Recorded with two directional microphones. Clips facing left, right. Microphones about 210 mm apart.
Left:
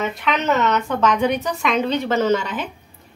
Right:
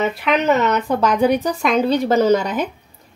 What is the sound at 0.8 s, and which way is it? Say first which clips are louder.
A woman's voice: right 3 dB; 35° right (ahead or behind).